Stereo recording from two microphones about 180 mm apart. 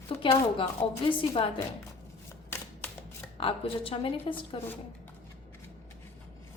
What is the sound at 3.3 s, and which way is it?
A woman's voice, 30° left (ahead or behind).